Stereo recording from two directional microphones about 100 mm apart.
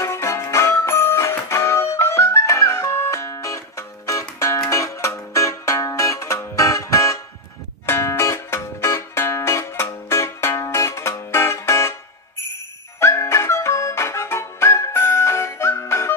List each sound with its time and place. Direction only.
0.0 s music: 30° left (ahead or behind)
13.0 s music: 30° left (ahead or behind)